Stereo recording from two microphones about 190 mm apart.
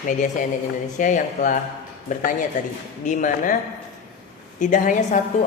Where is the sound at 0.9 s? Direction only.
40° left (ahead or behind).